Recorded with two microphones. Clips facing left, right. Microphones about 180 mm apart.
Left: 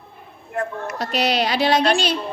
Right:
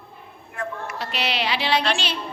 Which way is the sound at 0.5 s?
40° left (ahead or behind).